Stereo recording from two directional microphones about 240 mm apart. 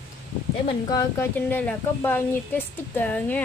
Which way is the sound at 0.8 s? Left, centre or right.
Centre.